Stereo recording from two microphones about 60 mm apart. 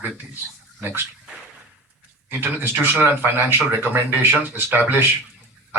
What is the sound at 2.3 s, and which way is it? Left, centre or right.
Speech, right.